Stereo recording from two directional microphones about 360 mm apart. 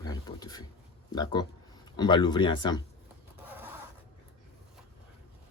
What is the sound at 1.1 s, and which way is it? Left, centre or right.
Speech, centre.